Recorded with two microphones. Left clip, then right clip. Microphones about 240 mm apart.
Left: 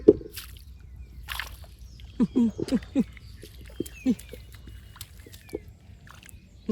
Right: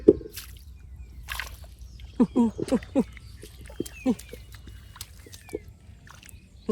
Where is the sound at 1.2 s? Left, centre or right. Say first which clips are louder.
Even; centre.